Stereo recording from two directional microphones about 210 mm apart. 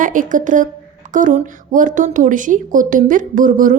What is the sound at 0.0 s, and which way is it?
A woman's voice, 40° right (ahead or behind).